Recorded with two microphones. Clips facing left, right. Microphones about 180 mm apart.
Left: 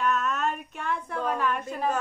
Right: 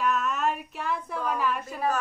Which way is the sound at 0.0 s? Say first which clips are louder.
Even; centre (ahead or behind).